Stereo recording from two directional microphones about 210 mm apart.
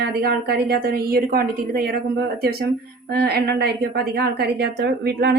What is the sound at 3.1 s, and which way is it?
A woman's voice, 50° right (ahead or behind).